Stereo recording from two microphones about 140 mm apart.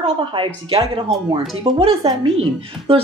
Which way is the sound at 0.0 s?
40° right (ahead or behind).